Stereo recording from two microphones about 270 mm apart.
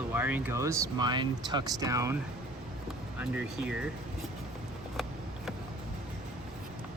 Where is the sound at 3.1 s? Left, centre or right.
Centre.